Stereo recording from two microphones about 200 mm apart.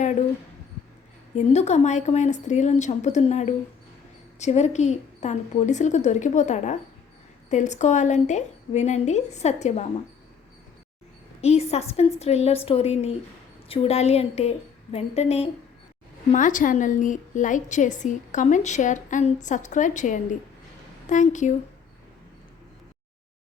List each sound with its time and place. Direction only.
1.4 s a woman's voice: 35° left (ahead or behind)
11.3 s a woman's voice: 30° left (ahead or behind)